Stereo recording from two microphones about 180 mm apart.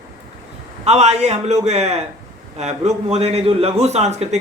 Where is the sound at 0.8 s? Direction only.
40° right (ahead or behind).